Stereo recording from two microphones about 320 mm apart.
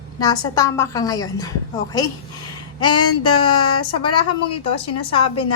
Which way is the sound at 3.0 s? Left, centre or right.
Left.